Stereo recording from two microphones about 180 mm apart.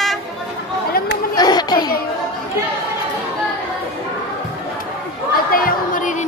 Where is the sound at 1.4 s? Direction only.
20° left (ahead or behind).